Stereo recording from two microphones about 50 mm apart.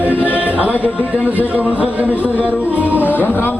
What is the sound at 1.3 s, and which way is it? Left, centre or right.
Speech, right.